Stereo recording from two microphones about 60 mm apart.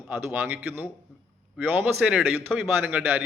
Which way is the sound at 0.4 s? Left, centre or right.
Right.